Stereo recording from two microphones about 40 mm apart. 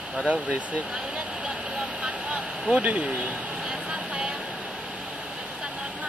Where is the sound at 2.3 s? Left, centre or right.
Right.